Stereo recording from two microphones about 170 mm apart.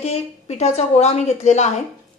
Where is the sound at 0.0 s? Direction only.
40° left (ahead or behind).